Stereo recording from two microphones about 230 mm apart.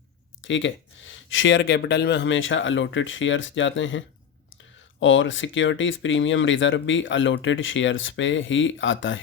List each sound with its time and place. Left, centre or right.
0.4 s speech: left